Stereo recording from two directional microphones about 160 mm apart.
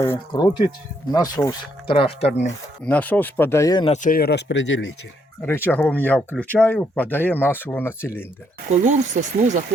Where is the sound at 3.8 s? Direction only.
50° left (ahead or behind); by 4.5 s 90° left.